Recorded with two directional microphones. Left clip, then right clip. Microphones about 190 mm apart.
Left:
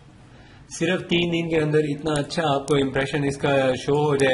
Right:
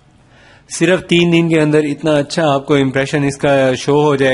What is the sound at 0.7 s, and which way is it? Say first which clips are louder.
A man's voice: right 10 dB; 50° right (ahead or behind).